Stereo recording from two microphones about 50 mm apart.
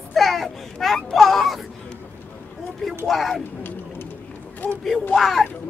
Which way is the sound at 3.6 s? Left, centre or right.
Left.